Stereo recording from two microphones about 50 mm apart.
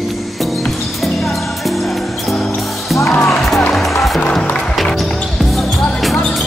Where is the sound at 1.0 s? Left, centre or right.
Centre.